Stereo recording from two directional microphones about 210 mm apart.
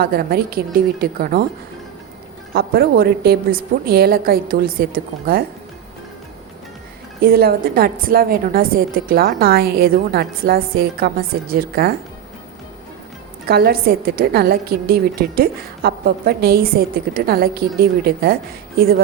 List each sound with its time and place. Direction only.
0.0 s a woman's voice: 45° right (ahead or behind)
2.5 s a woman's voice: 45° right (ahead or behind)
7.2 s a woman's voice: 45° right (ahead or behind)
13.5 s a woman's voice: 45° right (ahead or behind)